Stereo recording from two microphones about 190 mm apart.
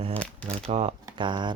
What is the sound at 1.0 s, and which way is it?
Speech, 25° right (ahead or behind).